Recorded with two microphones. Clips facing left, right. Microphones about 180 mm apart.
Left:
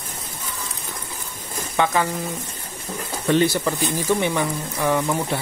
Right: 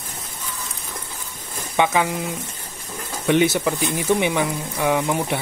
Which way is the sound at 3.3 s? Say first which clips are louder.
Right 1 dB; 15° right (ahead or behind).